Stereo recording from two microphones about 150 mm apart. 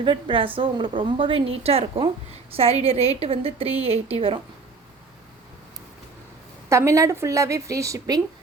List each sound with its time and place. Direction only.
0.0 s a woman's voice: 35° right (ahead or behind)
6.7 s a woman's voice: 20° right (ahead or behind)